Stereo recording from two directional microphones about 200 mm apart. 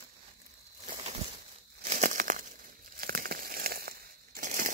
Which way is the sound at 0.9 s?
30° right (ahead or behind).